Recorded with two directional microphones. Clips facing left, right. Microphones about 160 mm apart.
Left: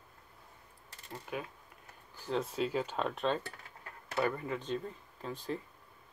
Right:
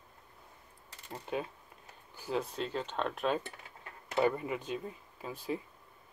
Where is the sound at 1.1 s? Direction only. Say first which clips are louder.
Right 4 dB; 25° right (ahead or behind).